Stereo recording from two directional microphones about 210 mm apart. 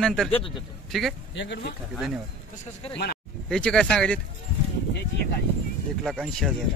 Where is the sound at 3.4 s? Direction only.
5° left (ahead or behind).